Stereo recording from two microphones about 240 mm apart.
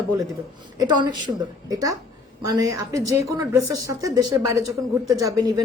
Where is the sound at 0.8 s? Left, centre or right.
Centre.